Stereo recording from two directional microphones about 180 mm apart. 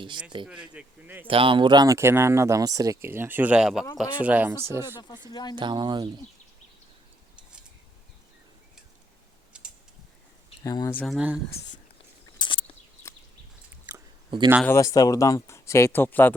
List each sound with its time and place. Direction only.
0.4 s speech: 5° right (ahead or behind)
1.3 s speech: 30° right (ahead or behind); by 4.9 s 15° right (ahead or behind)
4.9 s speech: 25° left (ahead or behind)
5.5 s speech: 25° right (ahead or behind)
10.6 s speech: 20° left (ahead or behind)
10.9 s speech: centre (ahead or behind)
12.4 s a sound: 30° left (ahead or behind)
14.3 s speech: 25° right (ahead or behind)
14.6 s speech: 15° left (ahead or behind)